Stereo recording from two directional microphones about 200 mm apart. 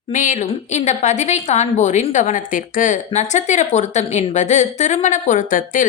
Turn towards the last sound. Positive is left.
turn(degrees=40)  # may be behind; listen again after turning